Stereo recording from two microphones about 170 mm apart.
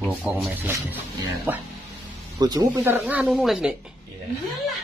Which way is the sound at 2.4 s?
20° right (ahead or behind).